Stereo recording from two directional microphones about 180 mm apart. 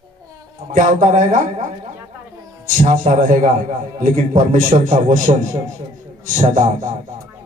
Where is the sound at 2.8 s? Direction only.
45° right (ahead or behind).